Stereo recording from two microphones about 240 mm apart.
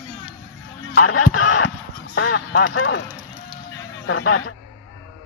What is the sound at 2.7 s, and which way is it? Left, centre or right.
Speech, left.